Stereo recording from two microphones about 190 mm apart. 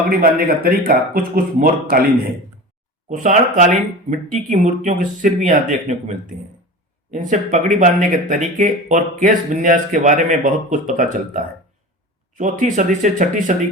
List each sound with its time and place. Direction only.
0.1 s a man's voice: 50° right (ahead or behind)
3.1 s speech: 40° right (ahead or behind)
12.3 s a man's voice: 45° right (ahead or behind)